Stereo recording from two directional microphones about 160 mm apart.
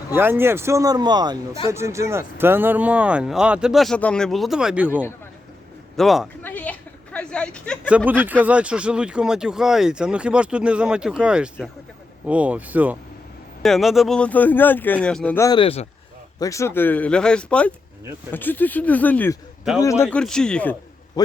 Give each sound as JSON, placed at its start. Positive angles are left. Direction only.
{"t": 0.2, "sound": "speech", "side_deg": -15}
{"t": 6.4, "sound": "a sound", "side_deg": 10}
{"t": 7.9, "sound": "speech", "side_deg": -10}
{"t": 13.6, "sound": "speech", "side_deg": 0}
{"t": 15.4, "sound": "speech", "side_deg": 25}
{"t": 15.6, "sound": "speech", "side_deg": 40}
{"t": 16.4, "sound": "speech", "side_deg": 20}
{"t": 20.1, "sound": "speech", "side_deg": 5}